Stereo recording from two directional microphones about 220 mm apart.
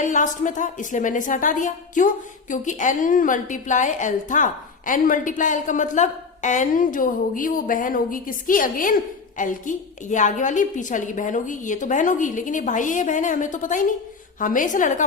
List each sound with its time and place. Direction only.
0.0 s a woman's voice: 35° left (ahead or behind)